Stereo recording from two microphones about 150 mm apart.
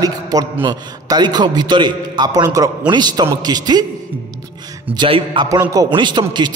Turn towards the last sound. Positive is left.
turn(degrees=-30)  # may be behind; listen again after turning